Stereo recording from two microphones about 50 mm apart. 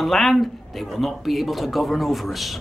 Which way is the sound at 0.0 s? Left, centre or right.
Centre.